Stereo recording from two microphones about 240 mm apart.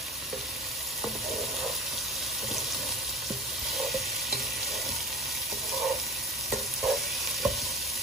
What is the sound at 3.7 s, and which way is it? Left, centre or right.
Stir, centre.